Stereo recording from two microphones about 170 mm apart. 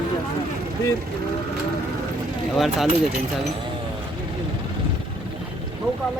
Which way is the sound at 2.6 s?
Centre (ahead or behind).